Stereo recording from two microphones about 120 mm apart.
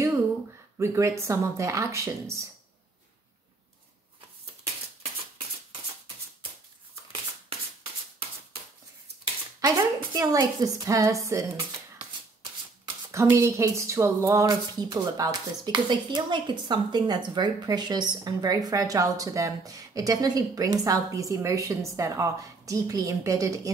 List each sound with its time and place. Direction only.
0.7 s speech: 25° right (ahead or behind)
9.6 s speech: 30° right (ahead or behind)
13.1 s speech: 25° right (ahead or behind)